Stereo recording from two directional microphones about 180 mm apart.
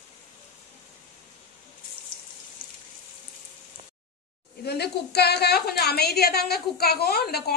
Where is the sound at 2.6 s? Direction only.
55° left (ahead or behind).